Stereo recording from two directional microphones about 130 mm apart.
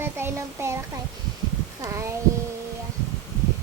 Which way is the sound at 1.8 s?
25° right (ahead or behind).